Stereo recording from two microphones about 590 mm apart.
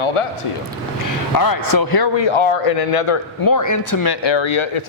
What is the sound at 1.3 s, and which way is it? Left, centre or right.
Speech, left.